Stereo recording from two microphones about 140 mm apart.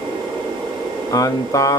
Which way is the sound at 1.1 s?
25° left (ahead or behind).